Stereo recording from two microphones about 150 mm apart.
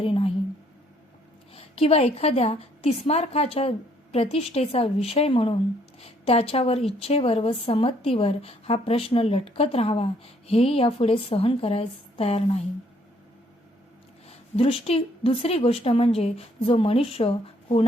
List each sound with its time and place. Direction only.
0.0 s a sound: 40° left (ahead or behind)
1.5 s a woman's voice: 40° left (ahead or behind)
14.3 s a woman's voice: 40° left (ahead or behind)